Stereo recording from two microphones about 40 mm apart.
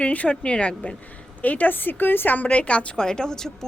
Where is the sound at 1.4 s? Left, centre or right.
Left.